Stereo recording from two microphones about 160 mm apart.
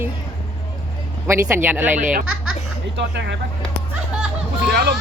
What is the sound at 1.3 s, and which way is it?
Speech, 15° right (ahead or behind).